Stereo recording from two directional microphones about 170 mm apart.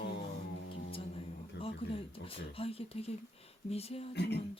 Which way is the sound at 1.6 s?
35° left (ahead or behind).